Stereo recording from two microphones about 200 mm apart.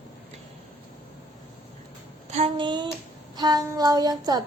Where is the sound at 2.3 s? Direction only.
25° right (ahead or behind).